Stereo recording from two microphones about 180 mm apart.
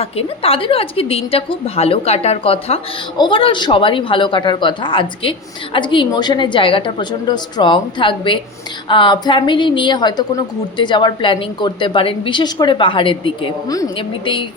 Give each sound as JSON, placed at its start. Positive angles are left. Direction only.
{"t": 0.0, "sound": "a woman's voice", "side_deg": 30}